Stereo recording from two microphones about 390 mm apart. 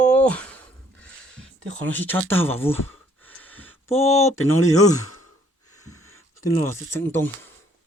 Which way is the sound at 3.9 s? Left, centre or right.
Centre.